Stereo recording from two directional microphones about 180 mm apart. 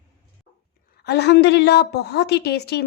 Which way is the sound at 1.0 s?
65° left (ahead or behind).